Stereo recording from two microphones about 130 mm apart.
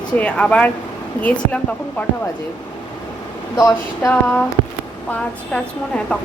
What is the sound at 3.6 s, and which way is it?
Speech, 25° left (ahead or behind).